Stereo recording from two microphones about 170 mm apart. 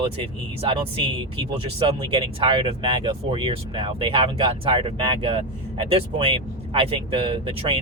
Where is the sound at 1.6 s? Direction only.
30° right (ahead or behind).